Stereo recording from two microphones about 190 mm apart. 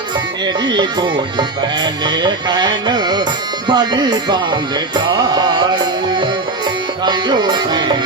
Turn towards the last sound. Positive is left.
turn(degrees=-25)  # may be behind; listen again after turning